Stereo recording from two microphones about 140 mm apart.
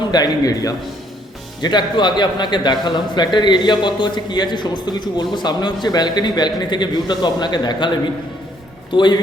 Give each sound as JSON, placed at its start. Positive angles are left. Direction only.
{"t": 0.1, "sound": "a man's voice", "side_deg": 25}
{"t": 8.9, "sound": "a man's voice", "side_deg": 35}